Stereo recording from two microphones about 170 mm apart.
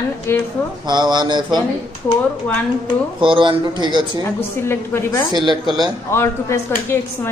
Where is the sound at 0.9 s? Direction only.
25° right (ahead or behind).